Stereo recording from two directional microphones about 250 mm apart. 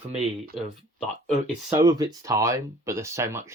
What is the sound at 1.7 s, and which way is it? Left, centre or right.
Speech, centre.